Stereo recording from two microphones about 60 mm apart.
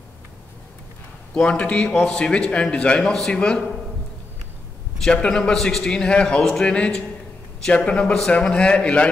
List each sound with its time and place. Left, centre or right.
1.3 s a man's voice: centre
5.1 s a man's voice: centre